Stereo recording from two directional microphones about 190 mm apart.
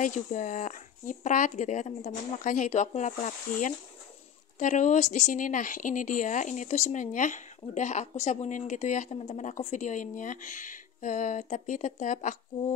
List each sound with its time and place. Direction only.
0.0 s a woman's voice: 40° left (ahead or behind)